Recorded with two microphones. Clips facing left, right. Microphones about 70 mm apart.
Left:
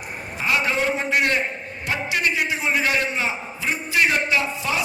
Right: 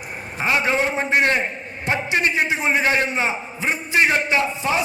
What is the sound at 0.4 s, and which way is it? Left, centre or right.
A man's voice, right.